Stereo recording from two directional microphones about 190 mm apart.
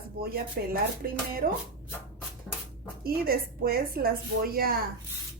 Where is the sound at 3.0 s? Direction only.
50° right (ahead or behind).